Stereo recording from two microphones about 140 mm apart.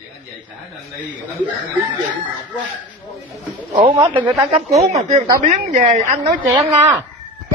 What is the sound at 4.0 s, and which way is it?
Speech, 35° right (ahead or behind).